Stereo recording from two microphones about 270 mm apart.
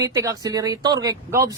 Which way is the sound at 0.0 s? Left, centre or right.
Centre.